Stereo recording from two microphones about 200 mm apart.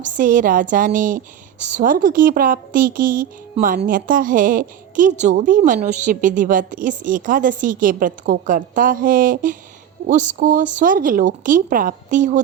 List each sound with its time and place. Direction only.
0.0 s a woman's voice: 40° right (ahead or behind)